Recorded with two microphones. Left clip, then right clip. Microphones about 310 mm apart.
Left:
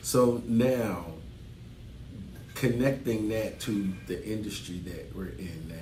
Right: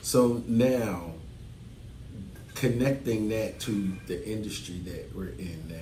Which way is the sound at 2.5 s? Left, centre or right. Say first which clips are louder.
Even; centre.